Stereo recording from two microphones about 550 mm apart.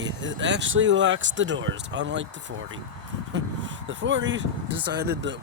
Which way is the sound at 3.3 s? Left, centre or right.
Centre.